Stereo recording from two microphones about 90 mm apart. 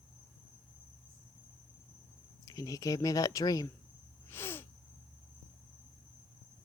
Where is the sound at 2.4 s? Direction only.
40° left (ahead or behind).